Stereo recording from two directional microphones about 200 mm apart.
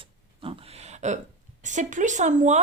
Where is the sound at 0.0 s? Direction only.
25° right (ahead or behind).